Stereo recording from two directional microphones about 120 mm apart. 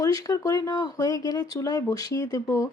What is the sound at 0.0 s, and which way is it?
A woman's voice, 30° left (ahead or behind).